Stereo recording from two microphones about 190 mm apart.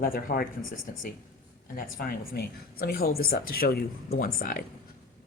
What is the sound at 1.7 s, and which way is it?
Speech, 50° left (ahead or behind).